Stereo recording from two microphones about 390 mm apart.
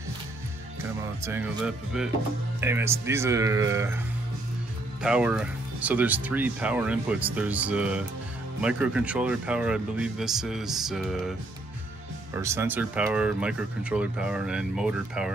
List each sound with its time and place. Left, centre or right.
0.8 s speech: centre
5.0 s speech: centre
12.4 s speech: centre